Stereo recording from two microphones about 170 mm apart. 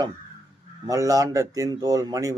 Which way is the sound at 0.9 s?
20° right (ahead or behind).